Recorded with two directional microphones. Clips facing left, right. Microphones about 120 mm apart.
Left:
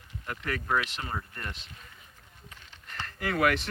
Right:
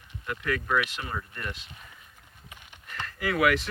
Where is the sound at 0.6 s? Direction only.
30° left (ahead or behind).